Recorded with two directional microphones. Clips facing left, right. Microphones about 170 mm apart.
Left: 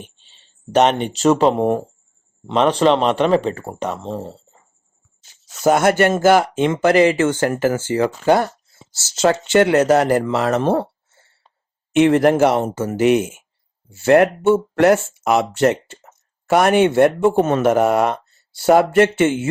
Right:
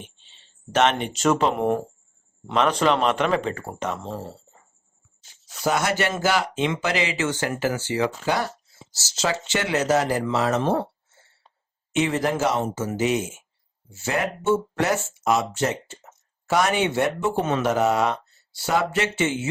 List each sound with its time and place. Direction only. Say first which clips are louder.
0.7 s speech: left 5 dB; 35° left (ahead or behind)
5.6 s speech: left 9 dB; 50° left (ahead or behind)
11.9 s speech: left 10 dB; 60° left (ahead or behind)